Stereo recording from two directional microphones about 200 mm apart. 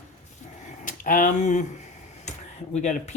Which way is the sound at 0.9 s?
45° left (ahead or behind).